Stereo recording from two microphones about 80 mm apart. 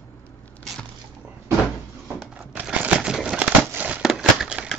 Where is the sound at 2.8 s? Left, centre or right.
Centre.